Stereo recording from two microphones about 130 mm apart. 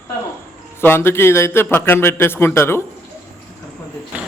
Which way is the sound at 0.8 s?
20° left (ahead or behind).